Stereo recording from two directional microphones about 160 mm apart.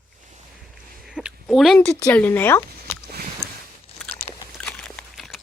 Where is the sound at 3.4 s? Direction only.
5° left (ahead or behind).